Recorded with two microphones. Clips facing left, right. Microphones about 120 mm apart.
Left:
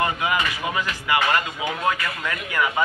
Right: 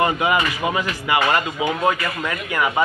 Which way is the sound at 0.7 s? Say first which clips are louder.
Right 3 dB; 20° right (ahead or behind).